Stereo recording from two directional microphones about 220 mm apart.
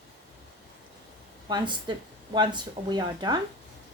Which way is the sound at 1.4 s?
20° right (ahead or behind).